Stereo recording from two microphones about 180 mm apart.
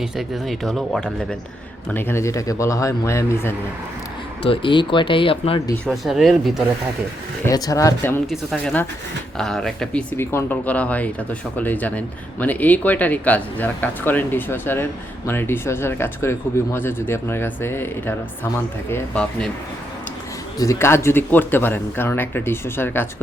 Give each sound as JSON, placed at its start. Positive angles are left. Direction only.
{"t": 0.0, "sound": "speech", "side_deg": 0}
{"t": 4.4, "sound": "speech", "side_deg": 30}
{"t": 5.8, "sound": "speech", "side_deg": 0}
{"t": 7.4, "sound": "speech", "side_deg": 20}
{"t": 8.3, "sound": "speech", "side_deg": 0}
{"t": 20.6, "sound": "speech", "side_deg": 15}